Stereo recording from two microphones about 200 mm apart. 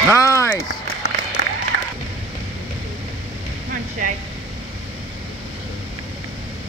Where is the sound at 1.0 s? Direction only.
90° left.